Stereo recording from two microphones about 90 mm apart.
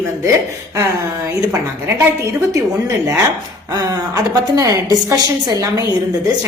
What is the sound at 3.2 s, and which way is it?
A woman's voice, 40° right (ahead or behind).